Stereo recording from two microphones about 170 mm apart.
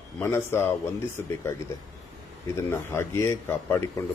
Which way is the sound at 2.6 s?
15° left (ahead or behind).